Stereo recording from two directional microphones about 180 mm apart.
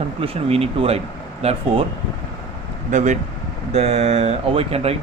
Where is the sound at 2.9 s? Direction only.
40° right (ahead or behind).